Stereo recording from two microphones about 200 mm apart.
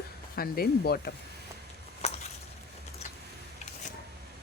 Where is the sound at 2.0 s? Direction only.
35° left (ahead or behind).